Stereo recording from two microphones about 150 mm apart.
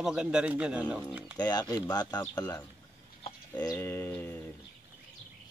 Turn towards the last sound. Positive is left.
turn(degrees=10)  # may be behind; listen again after turning